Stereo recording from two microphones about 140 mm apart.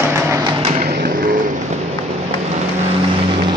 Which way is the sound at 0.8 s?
90° right.